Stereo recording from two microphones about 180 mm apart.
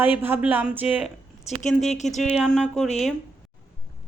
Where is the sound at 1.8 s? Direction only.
40° left (ahead or behind).